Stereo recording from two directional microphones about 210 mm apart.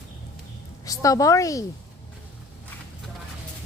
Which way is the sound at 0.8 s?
15° left (ahead or behind).